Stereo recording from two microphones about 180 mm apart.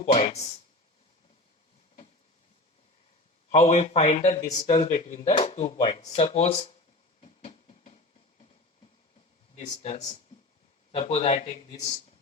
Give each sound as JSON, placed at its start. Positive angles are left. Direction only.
{"t": 0.0, "sound": "speech", "side_deg": 35}
{"t": 3.5, "sound": "speech", "side_deg": 40}
{"t": 7.2, "sound": "a sound", "side_deg": 35}
{"t": 9.6, "sound": "speech", "side_deg": 35}